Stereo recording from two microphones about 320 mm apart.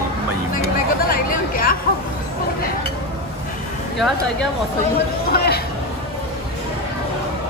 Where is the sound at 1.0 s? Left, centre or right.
Left.